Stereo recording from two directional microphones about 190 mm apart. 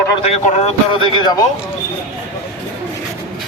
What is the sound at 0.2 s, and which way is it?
Speech, 35° left (ahead or behind).